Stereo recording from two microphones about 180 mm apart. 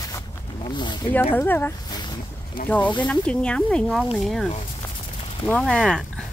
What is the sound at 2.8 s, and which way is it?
Speech, 25° left (ahead or behind).